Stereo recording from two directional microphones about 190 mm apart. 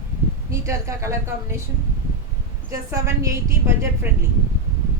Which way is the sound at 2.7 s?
15° right (ahead or behind).